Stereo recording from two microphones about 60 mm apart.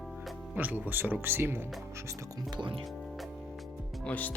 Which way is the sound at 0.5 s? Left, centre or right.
Right.